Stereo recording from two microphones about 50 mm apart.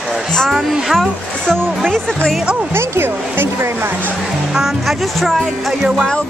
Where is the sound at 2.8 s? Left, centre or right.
Right.